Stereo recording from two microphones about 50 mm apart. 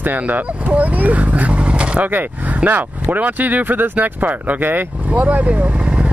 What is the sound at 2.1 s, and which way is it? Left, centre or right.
Speech, right.